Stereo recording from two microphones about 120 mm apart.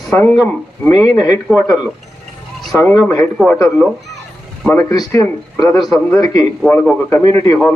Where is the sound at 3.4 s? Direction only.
Centre (ahead or behind).